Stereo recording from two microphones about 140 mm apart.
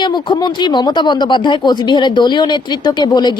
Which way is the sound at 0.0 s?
35° left (ahead or behind).